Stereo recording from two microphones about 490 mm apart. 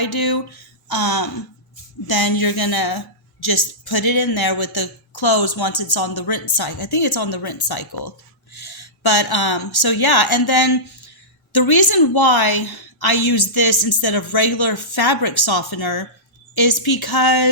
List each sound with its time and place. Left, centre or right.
0.0 s a woman's voice: left